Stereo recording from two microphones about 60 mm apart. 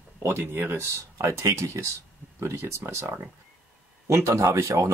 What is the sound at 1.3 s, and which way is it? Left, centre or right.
Speech, right.